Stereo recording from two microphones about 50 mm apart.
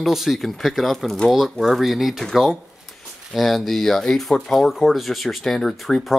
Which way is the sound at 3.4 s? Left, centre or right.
Centre.